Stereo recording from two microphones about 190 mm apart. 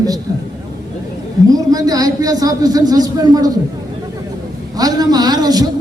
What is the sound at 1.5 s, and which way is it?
A man's voice, 20° right (ahead or behind).